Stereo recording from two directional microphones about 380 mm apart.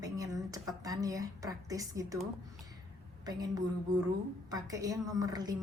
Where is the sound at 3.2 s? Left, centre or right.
Centre.